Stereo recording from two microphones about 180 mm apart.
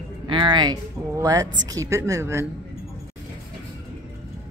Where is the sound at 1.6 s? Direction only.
20° right (ahead or behind).